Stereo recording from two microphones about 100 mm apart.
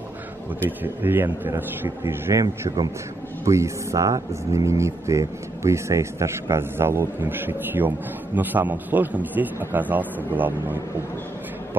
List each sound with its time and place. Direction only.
0.7 s speech: 20° right (ahead or behind)
3.4 s a man's voice: 30° right (ahead or behind)